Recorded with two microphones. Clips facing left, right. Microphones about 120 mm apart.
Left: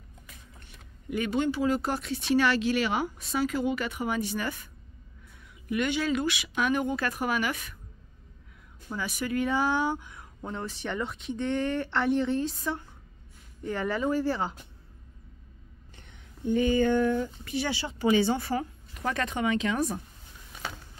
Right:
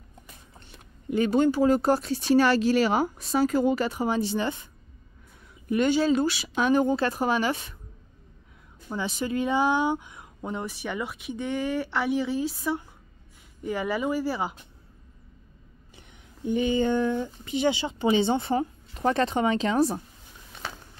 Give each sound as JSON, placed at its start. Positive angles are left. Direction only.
{"t": 0.3, "sound": "speech", "side_deg": -30}
{"t": 5.7, "sound": "speech", "side_deg": -35}
{"t": 8.8, "sound": "speech", "side_deg": -25}
{"t": 16.0, "sound": "speech", "side_deg": -15}